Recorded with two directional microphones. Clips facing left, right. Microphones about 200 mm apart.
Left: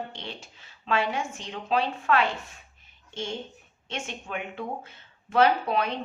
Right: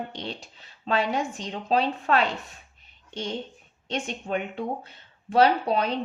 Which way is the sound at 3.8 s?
35° right (ahead or behind).